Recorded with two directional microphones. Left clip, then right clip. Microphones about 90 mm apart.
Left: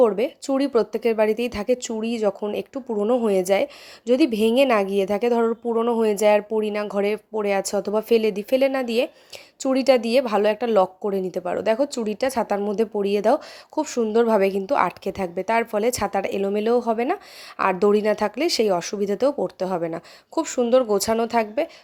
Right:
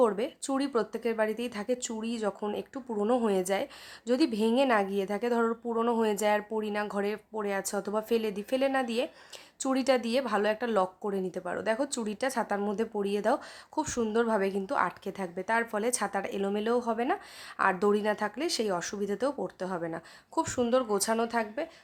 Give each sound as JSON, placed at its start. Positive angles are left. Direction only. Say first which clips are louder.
{"t": 0.4, "sound": "speech", "louder": "left 9 dB", "side_deg": 35}
{"t": 3.0, "sound": "a woman's voice", "louder": "left 7 dB", "side_deg": 10}
{"t": 3.2, "sound": "speech", "louder": "left 9 dB", "side_deg": 45}
{"t": 4.0, "sound": "speech", "louder": "left 9 dB", "side_deg": 35}
{"t": 6.0, "sound": "speech", "louder": "left 9 dB", "side_deg": 45}
{"t": 11.9, "sound": "speech", "louder": "left 9 dB", "side_deg": 25}
{"t": 12.1, "sound": "speech", "louder": "left 6 dB", "side_deg": 40}
{"t": 18.0, "sound": "speech", "louder": "left 9 dB", "side_deg": 55}